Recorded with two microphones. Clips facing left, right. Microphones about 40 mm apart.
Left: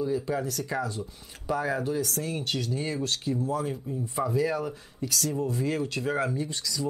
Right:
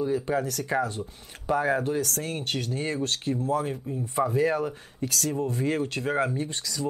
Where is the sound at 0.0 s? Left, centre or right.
Right.